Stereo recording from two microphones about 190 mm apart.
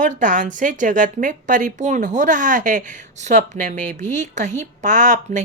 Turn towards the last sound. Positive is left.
turn(degrees=-40)  # may be behind; listen again after turning